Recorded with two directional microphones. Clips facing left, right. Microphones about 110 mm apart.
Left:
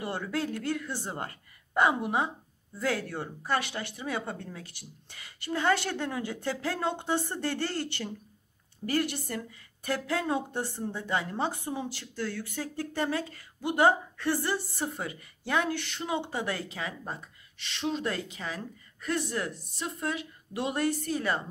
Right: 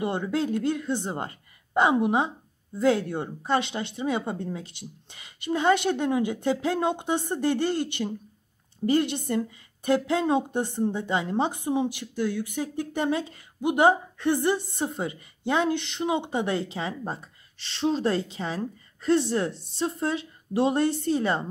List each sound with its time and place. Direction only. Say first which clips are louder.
0.0 s a woman's voice: right 6 dB; 20° right (ahead or behind)